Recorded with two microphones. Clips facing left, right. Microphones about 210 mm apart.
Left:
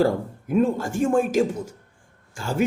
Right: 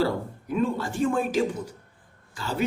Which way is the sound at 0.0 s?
45° left (ahead or behind).